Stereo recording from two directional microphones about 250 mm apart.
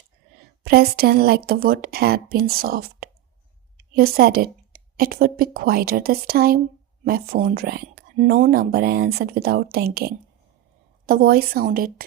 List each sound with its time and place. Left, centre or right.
0.6 s speech: right